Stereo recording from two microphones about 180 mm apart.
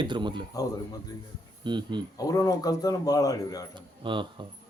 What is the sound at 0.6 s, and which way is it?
Speech, 20° left (ahead or behind).